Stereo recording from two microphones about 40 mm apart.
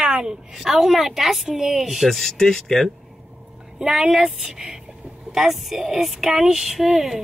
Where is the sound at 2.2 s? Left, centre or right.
Centre.